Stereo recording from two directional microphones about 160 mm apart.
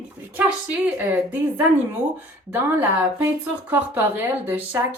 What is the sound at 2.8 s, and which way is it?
Speech, 10° right (ahead or behind).